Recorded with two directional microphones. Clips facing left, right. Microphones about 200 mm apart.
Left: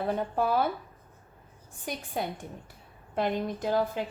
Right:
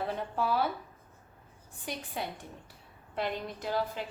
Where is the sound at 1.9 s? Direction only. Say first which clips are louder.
Left 3 dB; 50° left (ahead or behind).